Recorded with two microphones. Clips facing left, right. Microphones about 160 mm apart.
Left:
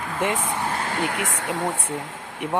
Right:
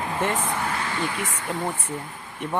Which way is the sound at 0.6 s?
40° left (ahead or behind).